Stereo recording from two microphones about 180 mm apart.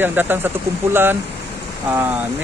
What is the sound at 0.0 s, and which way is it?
Speech, 10° right (ahead or behind).